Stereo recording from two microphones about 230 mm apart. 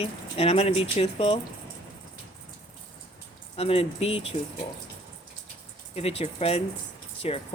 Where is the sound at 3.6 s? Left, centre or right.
Left.